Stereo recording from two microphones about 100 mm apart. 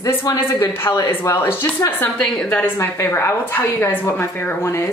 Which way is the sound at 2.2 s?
10° left (ahead or behind).